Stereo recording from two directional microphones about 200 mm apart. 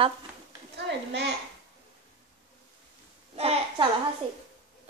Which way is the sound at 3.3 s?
25° right (ahead or behind).